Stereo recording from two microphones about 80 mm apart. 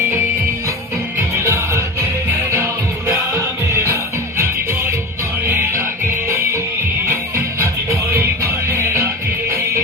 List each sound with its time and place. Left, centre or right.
1.4 s music: right